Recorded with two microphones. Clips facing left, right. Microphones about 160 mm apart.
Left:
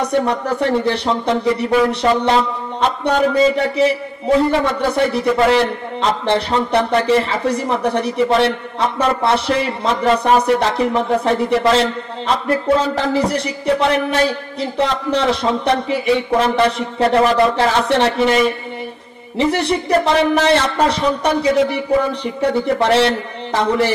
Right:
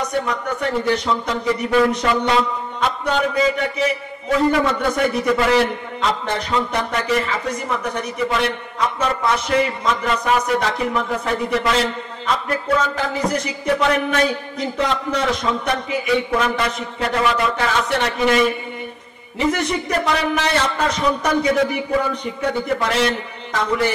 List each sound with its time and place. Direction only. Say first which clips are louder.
0.0 s a man's voice: left 5 dB; 35° left (ahead or behind)